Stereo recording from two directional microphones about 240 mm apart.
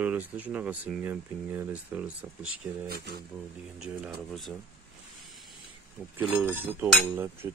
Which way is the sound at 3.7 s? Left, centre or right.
Centre.